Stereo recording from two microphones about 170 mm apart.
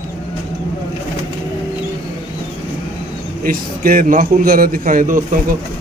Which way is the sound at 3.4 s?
55° right (ahead or behind).